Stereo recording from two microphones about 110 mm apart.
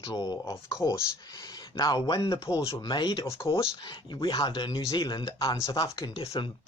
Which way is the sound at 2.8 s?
40° left (ahead or behind).